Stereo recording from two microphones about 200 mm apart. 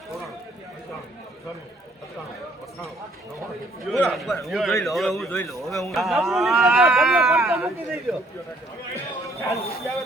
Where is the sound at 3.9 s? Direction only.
Centre (ahead or behind).